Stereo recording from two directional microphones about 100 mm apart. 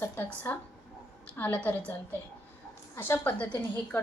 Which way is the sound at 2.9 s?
20° left (ahead or behind).